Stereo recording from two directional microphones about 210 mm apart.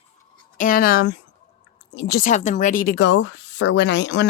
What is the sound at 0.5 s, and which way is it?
Speech, 40° left (ahead or behind).